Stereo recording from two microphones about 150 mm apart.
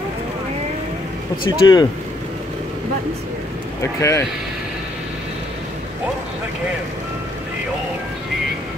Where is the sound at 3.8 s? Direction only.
20° left (ahead or behind).